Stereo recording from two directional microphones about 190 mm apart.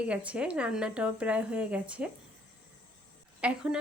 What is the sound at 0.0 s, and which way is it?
Speech, 5° right (ahead or behind).